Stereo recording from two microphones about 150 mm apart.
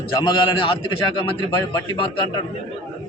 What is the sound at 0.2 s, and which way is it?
A man's voice, 30° left (ahead or behind).